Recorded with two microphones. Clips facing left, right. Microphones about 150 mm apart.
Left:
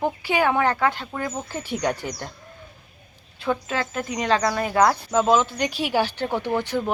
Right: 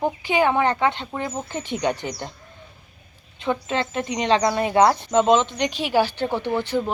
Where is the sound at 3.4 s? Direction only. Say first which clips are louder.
Right 1 dB; 20° right (ahead or behind).